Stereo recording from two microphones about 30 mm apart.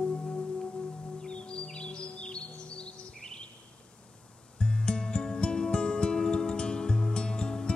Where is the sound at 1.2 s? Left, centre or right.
Left.